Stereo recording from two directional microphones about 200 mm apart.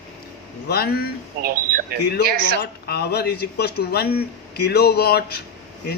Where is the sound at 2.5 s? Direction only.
55° left (ahead or behind).